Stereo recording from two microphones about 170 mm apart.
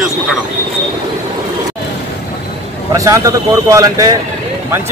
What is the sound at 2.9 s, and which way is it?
A man's voice, 20° right (ahead or behind).